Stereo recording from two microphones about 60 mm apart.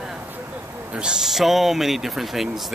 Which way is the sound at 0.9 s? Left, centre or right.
Centre.